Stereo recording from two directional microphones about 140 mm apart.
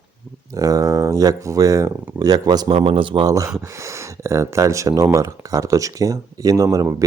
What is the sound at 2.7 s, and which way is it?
Speech, 40° right (ahead or behind).